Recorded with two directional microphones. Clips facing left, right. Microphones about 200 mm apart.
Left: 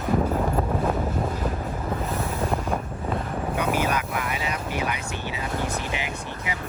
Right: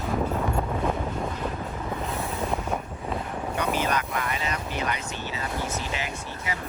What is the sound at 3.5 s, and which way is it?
Vehicle, 10° left (ahead or behind).